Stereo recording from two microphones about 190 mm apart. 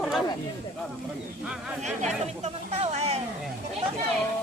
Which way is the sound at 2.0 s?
35° right (ahead or behind).